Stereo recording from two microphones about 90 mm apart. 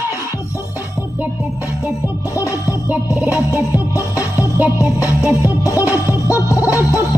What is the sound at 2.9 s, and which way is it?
Music, 15° right (ahead or behind).